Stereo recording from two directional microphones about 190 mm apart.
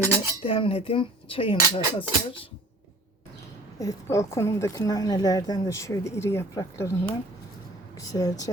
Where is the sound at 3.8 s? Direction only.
15° left (ahead or behind).